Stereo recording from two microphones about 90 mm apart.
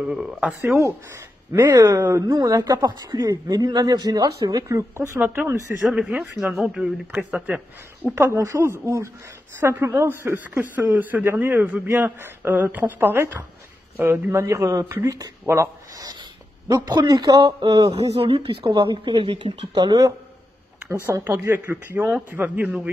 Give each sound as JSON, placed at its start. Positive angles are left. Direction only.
{"t": 0.0, "sound": "speech", "side_deg": -5}
{"t": 1.5, "sound": "speech", "side_deg": -50}
{"t": 2.0, "sound": "speech", "side_deg": -30}
{"t": 5.8, "sound": "speech", "side_deg": -5}
{"t": 8.1, "sound": "a woman's voice", "side_deg": -30}
{"t": 14.4, "sound": "speech", "side_deg": -35}
{"t": 14.9, "sound": "a woman's voice", "side_deg": -25}
{"t": 15.1, "sound": "speech", "side_deg": -35}
{"t": 16.6, "sound": "speech", "side_deg": -50}
{"t": 17.6, "sound": "speech", "side_deg": -65}
{"t": 18.1, "sound": "speech", "side_deg": -90}
{"t": 21.0, "sound": "a woman's voice", "side_deg": -30}